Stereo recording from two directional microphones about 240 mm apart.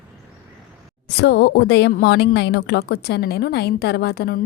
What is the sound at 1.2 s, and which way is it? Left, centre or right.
A woman's voice, left.